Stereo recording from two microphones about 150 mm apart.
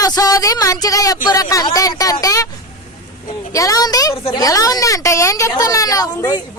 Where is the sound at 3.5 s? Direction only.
20° left (ahead or behind).